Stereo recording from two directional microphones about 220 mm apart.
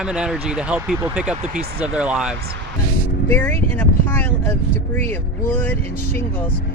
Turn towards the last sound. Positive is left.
turn(degrees=10)  # may be behind; listen again after turning